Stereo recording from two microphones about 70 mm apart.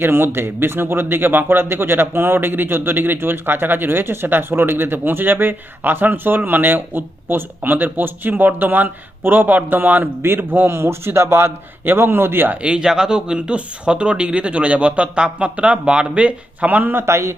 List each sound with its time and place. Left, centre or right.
0.0 s speech: right
12.6 s speech: centre; by 17.3 s right